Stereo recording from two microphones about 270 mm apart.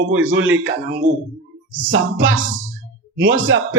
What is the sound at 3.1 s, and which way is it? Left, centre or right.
Speech, right.